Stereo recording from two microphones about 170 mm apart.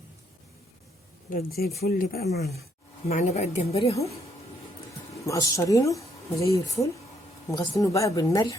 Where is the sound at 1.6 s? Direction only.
65° left (ahead or behind).